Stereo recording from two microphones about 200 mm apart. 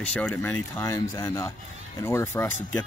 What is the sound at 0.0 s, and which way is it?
Speech, 5° left (ahead or behind).